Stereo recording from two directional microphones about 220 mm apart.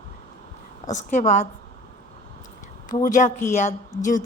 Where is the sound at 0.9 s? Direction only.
35° left (ahead or behind).